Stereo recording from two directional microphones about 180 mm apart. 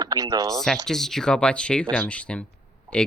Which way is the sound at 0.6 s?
Centre (ahead or behind).